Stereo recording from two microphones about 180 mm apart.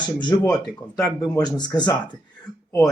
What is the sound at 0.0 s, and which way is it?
Speech, 25° left (ahead or behind).